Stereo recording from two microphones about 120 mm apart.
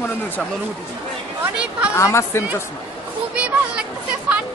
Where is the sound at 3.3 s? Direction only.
10° right (ahead or behind).